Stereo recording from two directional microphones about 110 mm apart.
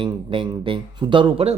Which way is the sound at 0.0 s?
50° right (ahead or behind).